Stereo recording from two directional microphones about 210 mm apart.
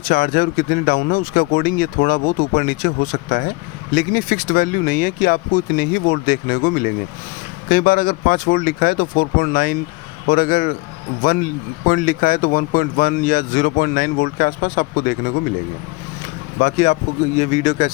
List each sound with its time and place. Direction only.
0.0 s speech: 40° left (ahead or behind)
16.6 s speech: 35° left (ahead or behind)